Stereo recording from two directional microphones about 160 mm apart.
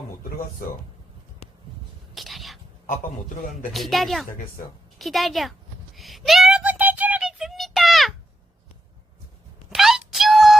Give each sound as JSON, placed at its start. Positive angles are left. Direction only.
{"t": 2.1, "sound": "whispering", "side_deg": 0}
{"t": 2.8, "sound": "a man's voice", "side_deg": 55}
{"t": 3.7, "sound": "speech", "side_deg": 0}
{"t": 6.0, "sound": "child singing", "side_deg": 0}
{"t": 9.6, "sound": "a sound", "side_deg": 0}